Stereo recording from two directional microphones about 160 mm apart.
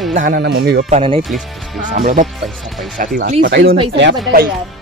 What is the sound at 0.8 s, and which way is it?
Speech, 40° right (ahead or behind).